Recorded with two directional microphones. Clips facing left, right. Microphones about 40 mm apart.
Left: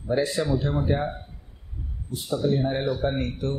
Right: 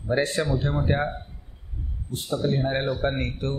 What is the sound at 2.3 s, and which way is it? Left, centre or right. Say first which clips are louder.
Speech: left 1 dB; right.